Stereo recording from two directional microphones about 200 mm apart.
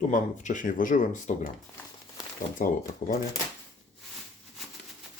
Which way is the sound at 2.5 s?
45° left (ahead or behind).